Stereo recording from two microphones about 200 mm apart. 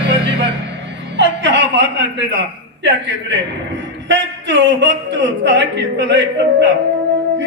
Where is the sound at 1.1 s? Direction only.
65° right (ahead or behind).